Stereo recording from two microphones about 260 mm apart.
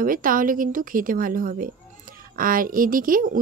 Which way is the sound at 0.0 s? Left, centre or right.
Right.